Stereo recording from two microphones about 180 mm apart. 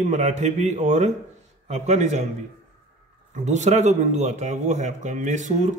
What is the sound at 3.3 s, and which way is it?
Speech, 40° right (ahead or behind).